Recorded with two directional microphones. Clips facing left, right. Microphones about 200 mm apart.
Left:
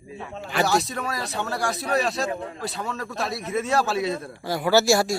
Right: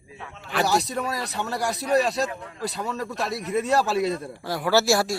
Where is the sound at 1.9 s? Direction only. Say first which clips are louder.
Right 3 dB; 40° right (ahead or behind).